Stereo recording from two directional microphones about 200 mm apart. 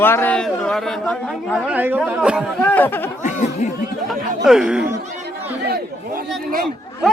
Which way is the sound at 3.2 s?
35° left (ahead or behind).